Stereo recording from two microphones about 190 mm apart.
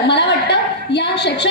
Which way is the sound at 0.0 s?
60° left (ahead or behind).